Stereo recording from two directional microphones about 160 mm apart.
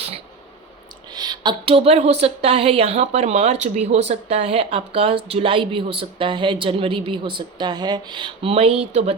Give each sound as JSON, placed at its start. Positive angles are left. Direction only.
{"t": 1.1, "sound": "a woman's voice", "side_deg": -25}